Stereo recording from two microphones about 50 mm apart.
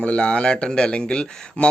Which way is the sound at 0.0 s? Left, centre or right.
Left.